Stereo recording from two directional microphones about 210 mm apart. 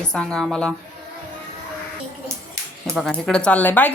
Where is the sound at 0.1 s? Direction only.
5° left (ahead or behind).